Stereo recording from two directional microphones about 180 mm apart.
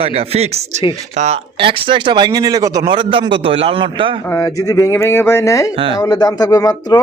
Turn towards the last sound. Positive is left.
turn(degrees=20)  # may be behind; listen again after turning